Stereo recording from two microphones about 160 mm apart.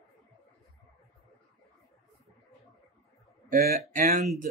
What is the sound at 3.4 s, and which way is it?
Speech, 50° right (ahead or behind).